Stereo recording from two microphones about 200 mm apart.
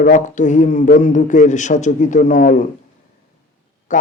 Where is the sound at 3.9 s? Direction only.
40° left (ahead or behind).